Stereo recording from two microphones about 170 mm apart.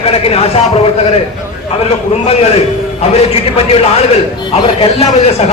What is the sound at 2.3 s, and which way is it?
A man's voice, 35° left (ahead or behind).